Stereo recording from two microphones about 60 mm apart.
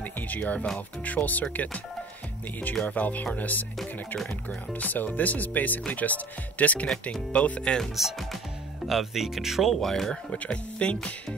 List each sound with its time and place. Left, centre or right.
0.0 s music: left
0.7 s speech: left
4.7 s speech: left
7.9 s speech: centre
10.3 s speech: centre